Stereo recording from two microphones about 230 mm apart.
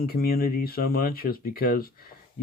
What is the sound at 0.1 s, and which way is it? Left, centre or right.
Speech, left.